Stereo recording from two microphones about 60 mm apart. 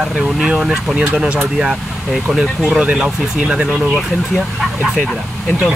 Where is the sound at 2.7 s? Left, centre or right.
Centre.